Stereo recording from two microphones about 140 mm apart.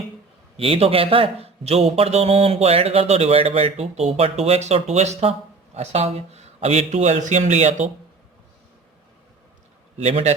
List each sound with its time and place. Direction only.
0.5 s a man's voice: 45° right (ahead or behind)
10.0 s a man's voice: 50° right (ahead or behind)